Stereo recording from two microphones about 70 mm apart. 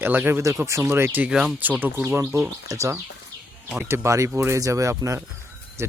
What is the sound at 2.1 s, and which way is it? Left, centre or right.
Speech, right.